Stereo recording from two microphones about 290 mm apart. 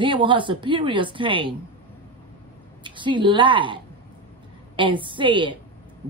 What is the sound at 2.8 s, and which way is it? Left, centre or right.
Speech, centre.